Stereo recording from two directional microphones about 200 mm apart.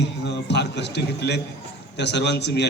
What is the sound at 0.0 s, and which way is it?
A man's voice, 60° left (ahead or behind).